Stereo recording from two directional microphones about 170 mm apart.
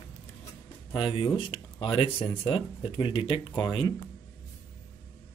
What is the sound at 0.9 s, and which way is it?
Speech, 25° left (ahead or behind).